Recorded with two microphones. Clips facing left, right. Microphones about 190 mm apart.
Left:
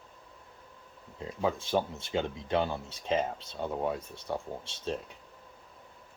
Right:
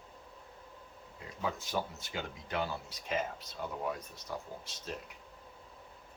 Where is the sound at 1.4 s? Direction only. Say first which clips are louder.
Left 7 dB; 30° left (ahead or behind).